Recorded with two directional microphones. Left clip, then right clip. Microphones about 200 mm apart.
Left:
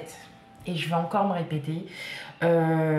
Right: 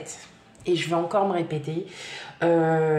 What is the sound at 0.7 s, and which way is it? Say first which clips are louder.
Speech: right 4 dB; 40° right (ahead or behind).